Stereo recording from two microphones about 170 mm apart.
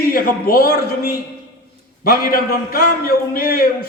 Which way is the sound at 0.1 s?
55° left (ahead or behind).